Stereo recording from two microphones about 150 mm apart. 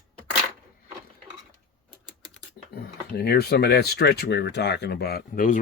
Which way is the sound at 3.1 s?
90° left.